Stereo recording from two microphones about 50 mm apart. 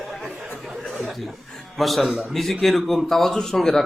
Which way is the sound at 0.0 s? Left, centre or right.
Centre.